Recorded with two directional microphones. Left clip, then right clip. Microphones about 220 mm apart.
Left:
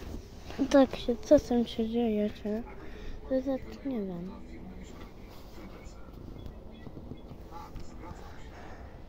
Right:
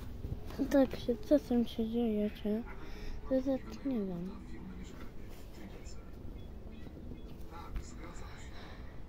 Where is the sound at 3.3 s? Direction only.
20° right (ahead or behind).